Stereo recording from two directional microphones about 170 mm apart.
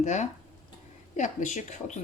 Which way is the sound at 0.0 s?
45° left (ahead or behind).